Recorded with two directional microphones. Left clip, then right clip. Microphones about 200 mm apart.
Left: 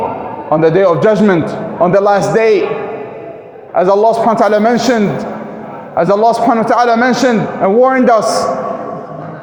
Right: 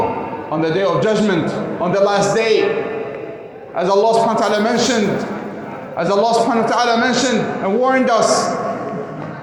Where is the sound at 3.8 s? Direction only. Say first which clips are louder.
Left 4 dB; 50° left (ahead or behind).